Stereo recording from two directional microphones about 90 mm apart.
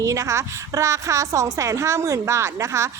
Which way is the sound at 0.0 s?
35° right (ahead or behind).